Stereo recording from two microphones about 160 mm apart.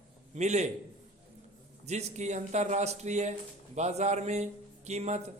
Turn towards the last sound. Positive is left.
turn(degrees=-45)  # may be behind; listen again after turning